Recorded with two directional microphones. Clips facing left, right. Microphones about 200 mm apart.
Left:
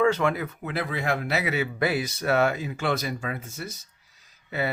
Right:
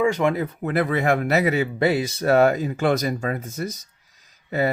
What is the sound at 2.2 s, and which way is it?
Speech, 40° right (ahead or behind).